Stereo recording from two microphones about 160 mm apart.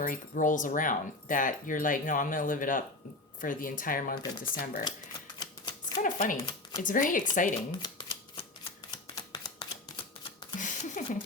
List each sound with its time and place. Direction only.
0.0 s speech: 55° left (ahead or behind)
5.4 s typewriter: 25° left (ahead or behind)
6.0 s speech: 55° left (ahead or behind)
6.4 s speech: 25° left (ahead or behind)
6.8 s speech: 55° left (ahead or behind)
7.8 s shuffling cards: 25° left (ahead or behind)
8.9 s a sound: 30° left (ahead or behind)
10.6 s a sound: 50° left (ahead or behind)